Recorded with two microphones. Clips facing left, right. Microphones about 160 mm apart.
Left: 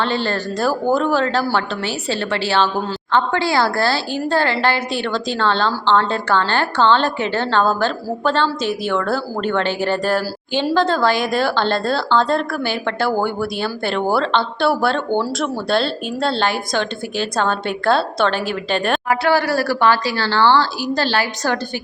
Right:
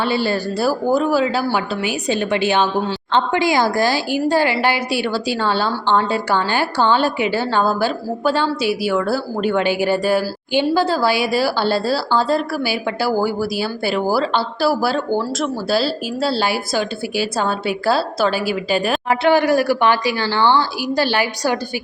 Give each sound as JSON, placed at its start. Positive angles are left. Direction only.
{"t": 0.0, "sound": "speech", "side_deg": -10}
{"t": 19.0, "sound": "speech", "side_deg": -20}